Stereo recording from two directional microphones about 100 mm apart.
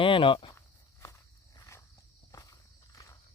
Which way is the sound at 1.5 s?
35° left (ahead or behind).